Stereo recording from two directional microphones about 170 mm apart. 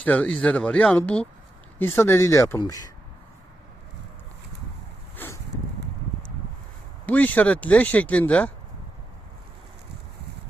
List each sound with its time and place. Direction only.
0.0 s speech: 10° left (ahead or behind)
5.1 s a sound: 15° left (ahead or behind)
7.0 s speech: 10° left (ahead or behind)